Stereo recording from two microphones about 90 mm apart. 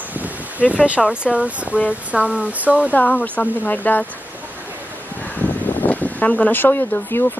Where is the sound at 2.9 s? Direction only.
20° left (ahead or behind).